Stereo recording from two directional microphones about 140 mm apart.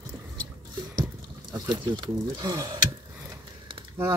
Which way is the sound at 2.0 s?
30° right (ahead or behind).